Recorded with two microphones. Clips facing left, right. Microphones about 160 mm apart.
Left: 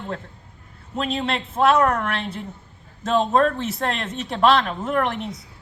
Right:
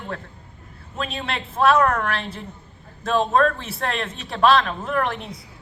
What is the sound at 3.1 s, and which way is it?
A man's voice, 20° left (ahead or behind).